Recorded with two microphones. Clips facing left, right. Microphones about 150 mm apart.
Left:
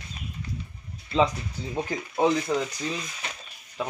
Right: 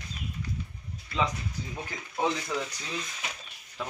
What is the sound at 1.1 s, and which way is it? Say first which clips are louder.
Speech: left 7 dB; 25° left (ahead or behind).